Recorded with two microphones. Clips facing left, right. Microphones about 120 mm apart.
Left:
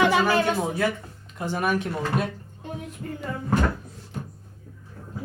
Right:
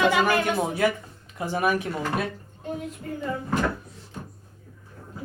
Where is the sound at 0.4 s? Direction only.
10° right (ahead or behind).